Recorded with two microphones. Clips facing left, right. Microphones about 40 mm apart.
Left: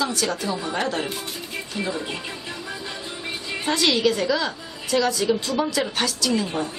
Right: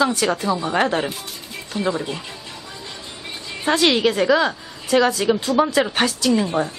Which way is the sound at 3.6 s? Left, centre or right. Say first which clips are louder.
Right 4 dB; right.